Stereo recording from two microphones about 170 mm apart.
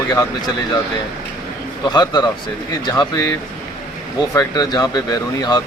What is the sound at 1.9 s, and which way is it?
Speech, 25° left (ahead or behind).